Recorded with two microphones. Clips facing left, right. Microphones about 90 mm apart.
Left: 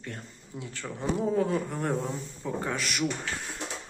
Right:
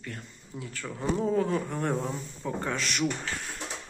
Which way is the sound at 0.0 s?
30° left (ahead or behind).